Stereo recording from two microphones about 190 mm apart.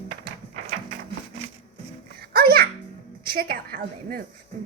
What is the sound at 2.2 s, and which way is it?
Music, 50° right (ahead or behind).